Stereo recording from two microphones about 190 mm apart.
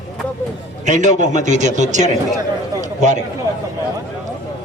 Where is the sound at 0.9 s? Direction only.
40° right (ahead or behind).